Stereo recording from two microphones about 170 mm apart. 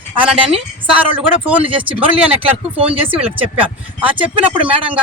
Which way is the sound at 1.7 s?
30° right (ahead or behind).